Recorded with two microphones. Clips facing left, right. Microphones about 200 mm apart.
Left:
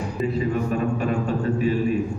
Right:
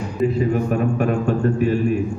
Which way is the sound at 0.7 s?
50° right (ahead or behind).